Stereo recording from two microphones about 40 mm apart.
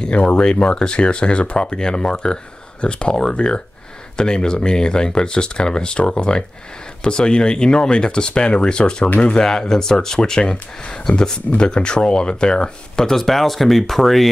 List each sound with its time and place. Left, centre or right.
0.0 s speech: left; by 14.3 s centre